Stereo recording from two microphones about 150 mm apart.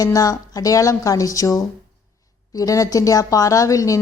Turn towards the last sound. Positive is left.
turn(degrees=20)  # may be behind; listen again after turning